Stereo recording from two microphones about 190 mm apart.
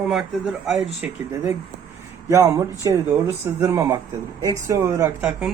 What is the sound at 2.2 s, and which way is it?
Speech, 15° right (ahead or behind).